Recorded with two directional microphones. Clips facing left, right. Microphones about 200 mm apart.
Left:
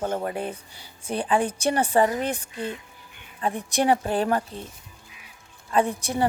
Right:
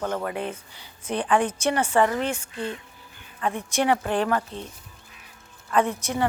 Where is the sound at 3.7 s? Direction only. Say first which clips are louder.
Left 1 dB; 35° left (ahead or behind).